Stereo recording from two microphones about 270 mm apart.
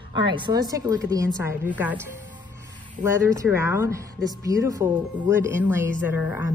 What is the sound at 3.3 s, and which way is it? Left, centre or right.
Speech, centre.